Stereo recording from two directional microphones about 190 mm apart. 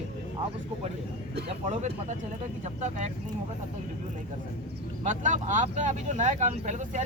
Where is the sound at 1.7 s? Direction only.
35° right (ahead or behind).